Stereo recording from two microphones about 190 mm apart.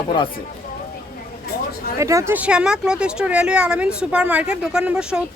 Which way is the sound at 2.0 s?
15° right (ahead or behind).